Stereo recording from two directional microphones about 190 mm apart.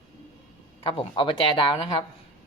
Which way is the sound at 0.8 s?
25° left (ahead or behind).